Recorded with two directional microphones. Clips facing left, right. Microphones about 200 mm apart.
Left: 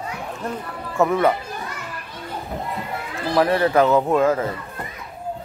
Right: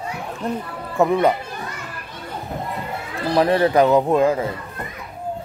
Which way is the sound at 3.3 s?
20° right (ahead or behind).